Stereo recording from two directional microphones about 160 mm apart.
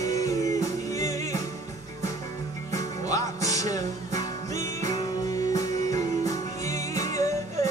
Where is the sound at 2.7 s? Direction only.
20° left (ahead or behind).